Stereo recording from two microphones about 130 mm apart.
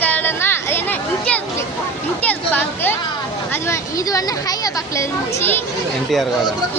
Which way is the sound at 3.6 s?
25° left (ahead or behind).